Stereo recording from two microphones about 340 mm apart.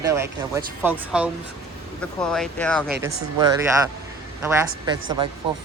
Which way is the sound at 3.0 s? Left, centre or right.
Centre.